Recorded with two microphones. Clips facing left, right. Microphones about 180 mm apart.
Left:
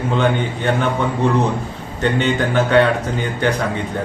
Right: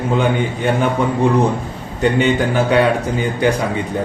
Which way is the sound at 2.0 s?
10° right (ahead or behind).